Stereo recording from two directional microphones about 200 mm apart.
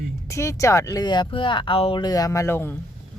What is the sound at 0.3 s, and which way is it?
Speech, 15° left (ahead or behind).